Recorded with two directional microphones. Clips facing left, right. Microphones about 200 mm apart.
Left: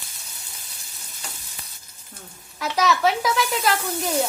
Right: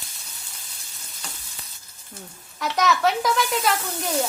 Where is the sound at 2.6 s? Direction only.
Centre (ahead or behind).